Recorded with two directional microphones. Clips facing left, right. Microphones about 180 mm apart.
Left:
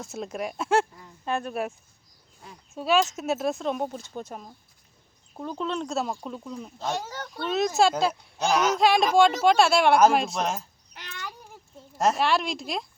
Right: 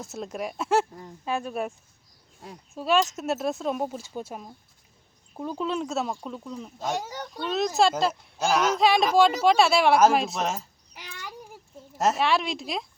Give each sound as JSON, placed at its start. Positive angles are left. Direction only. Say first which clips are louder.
{"t": 0.0, "sound": "speech", "louder": "left 1 dB", "side_deg": 0}
{"t": 2.7, "sound": "speech", "louder": "even", "side_deg": 0}
{"t": 6.7, "sound": "speech", "louder": "right 1 dB", "side_deg": -15}
{"t": 7.4, "sound": "speech", "louder": "left 1 dB", "side_deg": 5}